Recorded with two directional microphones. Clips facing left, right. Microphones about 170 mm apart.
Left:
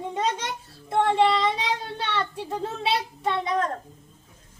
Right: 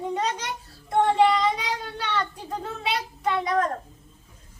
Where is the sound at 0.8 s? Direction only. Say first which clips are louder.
Right 1 dB; 25° left (ahead or behind).